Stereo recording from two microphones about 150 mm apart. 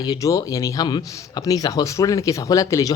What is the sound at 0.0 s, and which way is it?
A woman's voice, 25° left (ahead or behind).